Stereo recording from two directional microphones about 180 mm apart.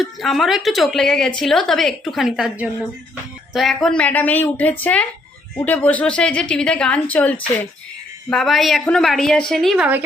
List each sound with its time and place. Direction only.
0.0 s a woman's voice: centre (ahead or behind)